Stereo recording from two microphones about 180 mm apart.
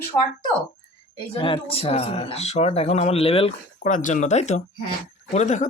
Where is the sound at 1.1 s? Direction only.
30° left (ahead or behind).